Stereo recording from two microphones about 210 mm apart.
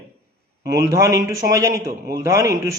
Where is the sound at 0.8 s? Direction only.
15° right (ahead or behind).